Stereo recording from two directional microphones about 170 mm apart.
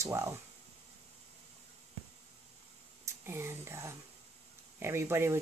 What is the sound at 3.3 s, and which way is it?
Speech, 15° right (ahead or behind).